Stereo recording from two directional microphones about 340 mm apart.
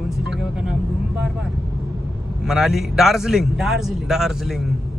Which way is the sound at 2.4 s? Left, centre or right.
Centre.